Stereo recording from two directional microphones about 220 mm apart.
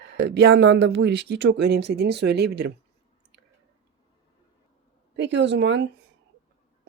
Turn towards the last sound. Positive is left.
turn(degrees=-55)  # may be behind; listen again after turning